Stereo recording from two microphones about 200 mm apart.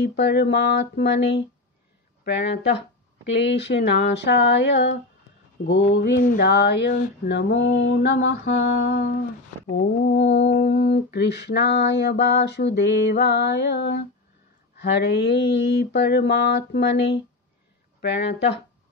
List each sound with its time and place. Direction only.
0.0 s mantra: 55° left (ahead or behind)